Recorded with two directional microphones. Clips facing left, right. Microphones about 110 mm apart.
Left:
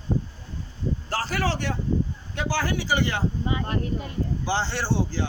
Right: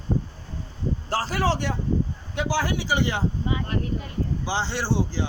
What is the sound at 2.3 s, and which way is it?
Speech, 15° right (ahead or behind).